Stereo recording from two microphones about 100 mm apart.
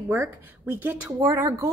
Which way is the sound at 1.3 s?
30° right (ahead or behind).